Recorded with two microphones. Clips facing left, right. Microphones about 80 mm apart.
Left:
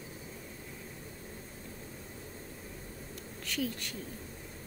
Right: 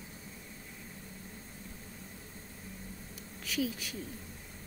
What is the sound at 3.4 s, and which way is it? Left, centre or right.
Speech, centre.